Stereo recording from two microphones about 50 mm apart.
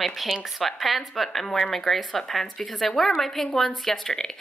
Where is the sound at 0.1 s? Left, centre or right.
Centre.